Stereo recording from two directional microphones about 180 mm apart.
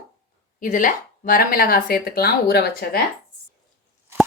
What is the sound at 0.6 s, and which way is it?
Speech, 50° left (ahead or behind).